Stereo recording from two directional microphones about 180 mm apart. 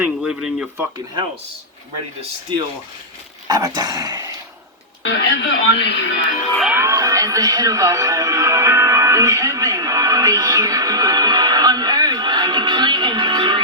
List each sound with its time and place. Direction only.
0.0 s speech: 5° right (ahead or behind)
3.4 s dog: 20° right (ahead or behind)
5.0 s speech: 90° left
6.7 s music: 15° right (ahead or behind)